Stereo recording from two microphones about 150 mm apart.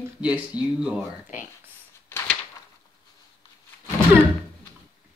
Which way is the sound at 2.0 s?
15° left (ahead or behind).